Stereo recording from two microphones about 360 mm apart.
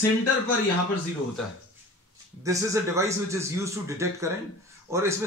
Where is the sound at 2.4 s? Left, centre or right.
Centre.